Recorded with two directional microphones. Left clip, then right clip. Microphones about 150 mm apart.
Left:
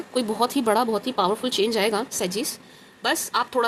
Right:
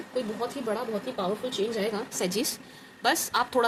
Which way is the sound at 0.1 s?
65° left (ahead or behind).